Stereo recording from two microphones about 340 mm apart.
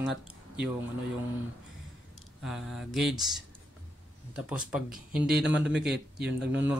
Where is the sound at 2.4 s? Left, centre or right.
Centre.